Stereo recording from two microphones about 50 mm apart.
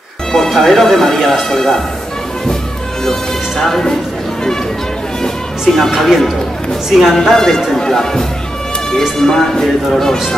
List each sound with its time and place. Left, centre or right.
0.6 s speech: centre
3.1 s speech: centre
5.2 s speech: centre
7.2 s speech: centre